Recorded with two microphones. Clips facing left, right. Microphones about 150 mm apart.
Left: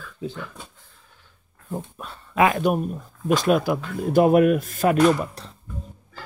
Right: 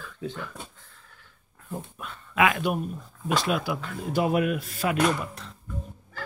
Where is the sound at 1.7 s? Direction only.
35° left (ahead or behind).